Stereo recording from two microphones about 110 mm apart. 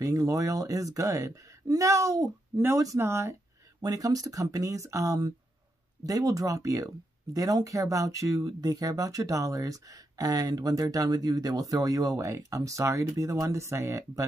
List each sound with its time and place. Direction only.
0.0 s speech: 30° right (ahead or behind)